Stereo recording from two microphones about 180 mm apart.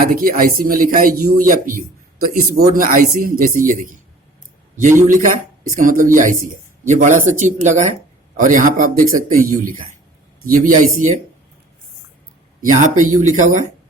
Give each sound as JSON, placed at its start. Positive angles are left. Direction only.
{"t": 0.0, "sound": "speech", "side_deg": -50}
{"t": 5.0, "sound": "speech", "side_deg": -45}
{"t": 12.6, "sound": "speech", "side_deg": -45}